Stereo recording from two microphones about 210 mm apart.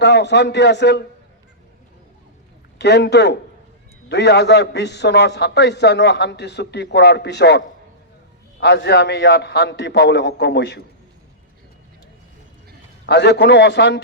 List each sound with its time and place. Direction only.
0.0 s a man's voice: 55° left (ahead or behind)
2.7 s a man's voice: 50° left (ahead or behind)
8.6 s a man's voice: 55° left (ahead or behind)
13.1 s a man's voice: 55° left (ahead or behind)